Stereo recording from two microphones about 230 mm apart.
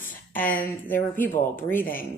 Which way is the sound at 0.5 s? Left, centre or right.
Centre.